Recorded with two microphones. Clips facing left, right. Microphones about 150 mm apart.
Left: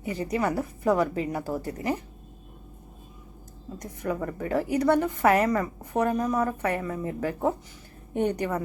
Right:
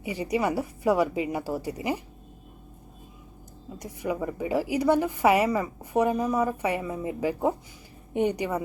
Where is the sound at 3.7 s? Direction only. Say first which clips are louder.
Even; 10° right (ahead or behind).